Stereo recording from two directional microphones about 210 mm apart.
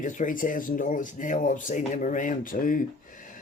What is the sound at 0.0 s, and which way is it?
Speech, 35° left (ahead or behind).